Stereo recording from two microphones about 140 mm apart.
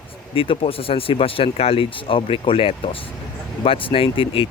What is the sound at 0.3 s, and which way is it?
Speech, 40° left (ahead or behind).